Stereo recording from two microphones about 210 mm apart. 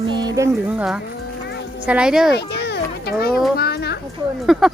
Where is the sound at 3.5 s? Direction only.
50° left (ahead or behind).